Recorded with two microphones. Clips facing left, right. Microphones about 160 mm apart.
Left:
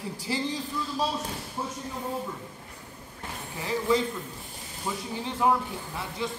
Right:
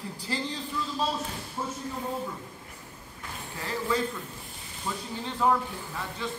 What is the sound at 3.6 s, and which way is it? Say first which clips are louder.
Speech: left 4 dB; 15° left (ahead or behind).